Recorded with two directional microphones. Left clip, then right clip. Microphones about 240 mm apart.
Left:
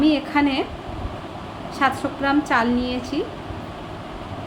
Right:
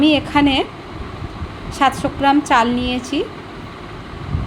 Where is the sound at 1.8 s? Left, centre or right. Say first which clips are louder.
Right 5 dB; centre.